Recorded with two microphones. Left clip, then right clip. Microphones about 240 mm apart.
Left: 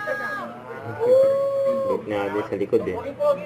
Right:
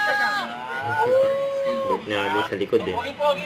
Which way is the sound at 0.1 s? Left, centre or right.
Centre.